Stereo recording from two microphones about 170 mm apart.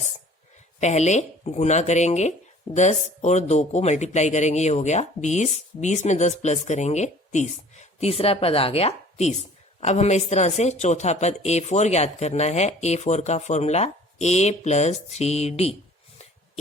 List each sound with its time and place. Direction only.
0.8 s speech: 40° left (ahead or behind)